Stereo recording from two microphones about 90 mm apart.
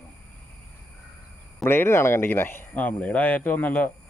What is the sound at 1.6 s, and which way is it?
Speech, 25° left (ahead or behind).